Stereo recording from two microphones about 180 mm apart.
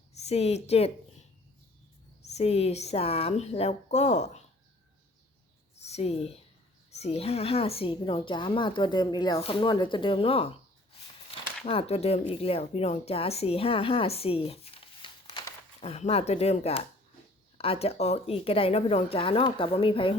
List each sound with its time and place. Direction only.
0.1 s a woman's voice: 35° left (ahead or behind)
2.2 s a woman's voice: 35° left (ahead or behind)
5.8 s a woman's voice: 35° left (ahead or behind)
11.3 s a sound: 30° left (ahead or behind)
12.3 s a woman's voice: 30° left (ahead or behind)